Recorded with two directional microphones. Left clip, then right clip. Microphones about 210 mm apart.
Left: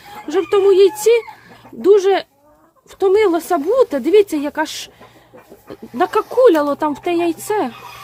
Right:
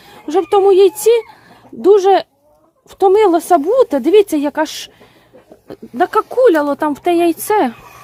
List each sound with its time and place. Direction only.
0.3 s speech: 15° right (ahead or behind)